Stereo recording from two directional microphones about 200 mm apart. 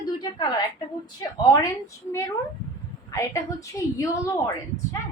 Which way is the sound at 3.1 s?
15° left (ahead or behind).